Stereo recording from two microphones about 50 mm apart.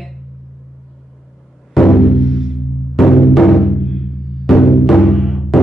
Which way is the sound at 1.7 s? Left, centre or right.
Centre.